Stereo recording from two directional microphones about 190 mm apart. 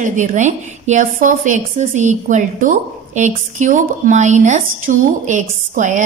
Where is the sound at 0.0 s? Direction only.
40° right (ahead or behind).